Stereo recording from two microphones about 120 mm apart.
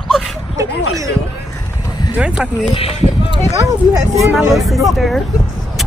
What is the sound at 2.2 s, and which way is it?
Speech, 5° right (ahead or behind).